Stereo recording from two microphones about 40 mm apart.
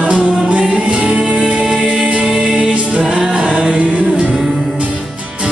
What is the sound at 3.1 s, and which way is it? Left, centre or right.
Music, centre.